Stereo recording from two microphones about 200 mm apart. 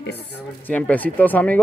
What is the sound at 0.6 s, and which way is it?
Speech, 10° left (ahead or behind).